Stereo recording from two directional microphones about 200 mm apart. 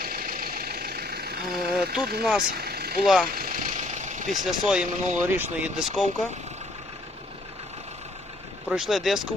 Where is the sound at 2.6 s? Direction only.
50° right (ahead or behind).